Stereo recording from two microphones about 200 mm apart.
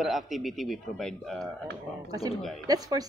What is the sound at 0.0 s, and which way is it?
Speech, centre (ahead or behind).